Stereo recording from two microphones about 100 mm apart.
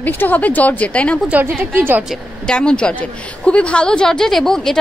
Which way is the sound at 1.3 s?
20° right (ahead or behind).